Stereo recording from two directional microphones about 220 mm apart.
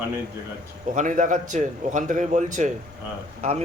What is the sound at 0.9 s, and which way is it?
A man's voice, 35° right (ahead or behind).